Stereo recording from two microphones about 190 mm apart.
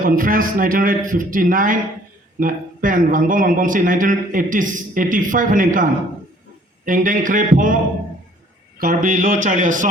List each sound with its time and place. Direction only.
0.0 s a man's voice: 45° right (ahead or behind)
8.8 s a man's voice: 45° right (ahead or behind)